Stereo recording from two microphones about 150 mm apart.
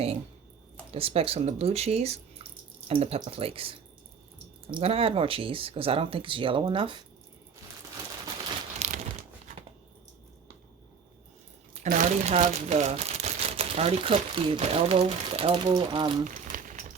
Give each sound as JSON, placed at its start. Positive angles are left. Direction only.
{"t": 0.9, "sound": "speech", "side_deg": -40}
{"t": 8.8, "sound": "crumpling", "side_deg": -50}
{"t": 11.7, "sound": "speech", "side_deg": -60}
{"t": 16.2, "sound": "a sound", "side_deg": -60}